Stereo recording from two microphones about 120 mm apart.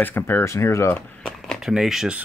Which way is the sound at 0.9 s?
10° left (ahead or behind).